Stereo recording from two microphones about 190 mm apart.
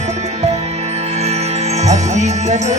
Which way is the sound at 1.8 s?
40° right (ahead or behind).